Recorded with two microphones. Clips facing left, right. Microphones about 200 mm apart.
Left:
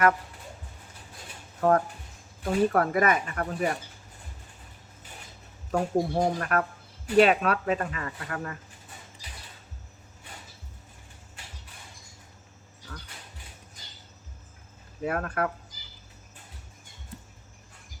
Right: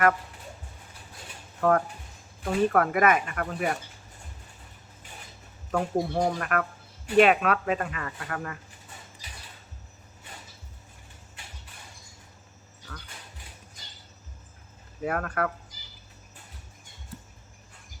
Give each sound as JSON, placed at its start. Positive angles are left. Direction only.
{"t": 2.4, "sound": "speech", "side_deg": 35}
{"t": 5.7, "sound": "speech", "side_deg": 40}
{"t": 15.0, "sound": "speech", "side_deg": 35}